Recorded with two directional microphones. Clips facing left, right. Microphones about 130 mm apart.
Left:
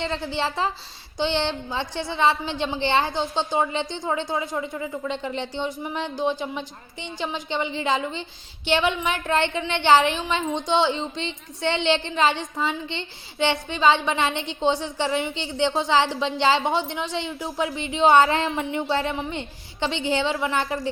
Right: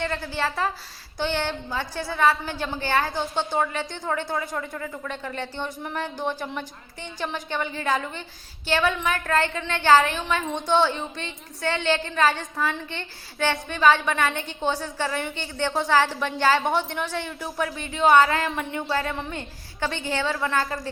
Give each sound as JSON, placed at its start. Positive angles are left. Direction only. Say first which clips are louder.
{"t": 0.0, "sound": "a woman's voice", "louder": "left 1 dB", "side_deg": 20}
{"t": 5.9, "sound": "a sound", "louder": "left 3 dB", "side_deg": 15}
{"t": 6.6, "sound": "a woman's voice", "louder": "left 1 dB", "side_deg": 20}